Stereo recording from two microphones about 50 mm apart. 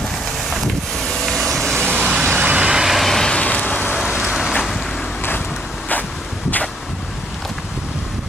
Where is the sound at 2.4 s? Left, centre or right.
Centre.